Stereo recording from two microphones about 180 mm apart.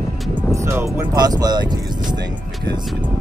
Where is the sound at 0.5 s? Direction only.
15° right (ahead or behind).